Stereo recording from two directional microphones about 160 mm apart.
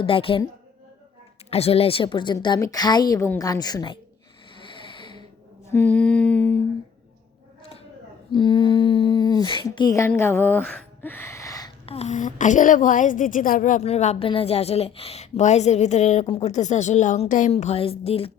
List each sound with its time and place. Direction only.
0.0 s a woman's voice: 35° left (ahead or behind)
1.5 s a woman's voice: 40° left (ahead or behind)
4.8 s a sound: 30° left (ahead or behind)
5.6 s humming: 10° left (ahead or behind)
8.3 s speech: 30° left (ahead or behind)
11.9 s a woman's voice: 45° left (ahead or behind)
16.2 s a woman's voice: 35° left (ahead or behind)
16.5 s a woman's voice: 45° left (ahead or behind)
17.5 s a woman's voice: 40° left (ahead or behind)